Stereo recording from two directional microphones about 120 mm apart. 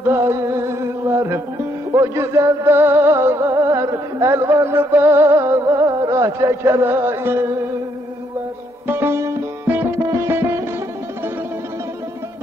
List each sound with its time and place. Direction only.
0.1 s music: 25° right (ahead or behind)
8.8 s music: 20° right (ahead or behind)